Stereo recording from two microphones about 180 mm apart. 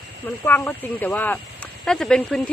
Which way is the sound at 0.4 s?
10° left (ahead or behind).